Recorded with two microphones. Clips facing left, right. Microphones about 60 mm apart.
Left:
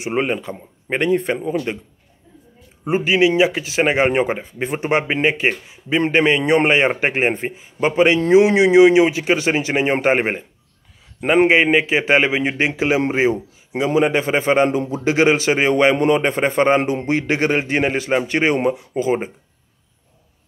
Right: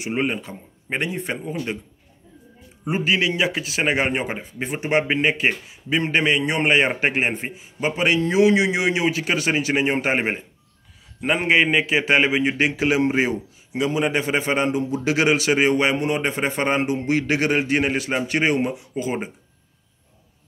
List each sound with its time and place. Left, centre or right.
0.0 s a man's voice: left
0.9 s a man's voice: left
2.8 s a man's voice: left
7.5 s a man's voice: left
11.4 s a man's voice: left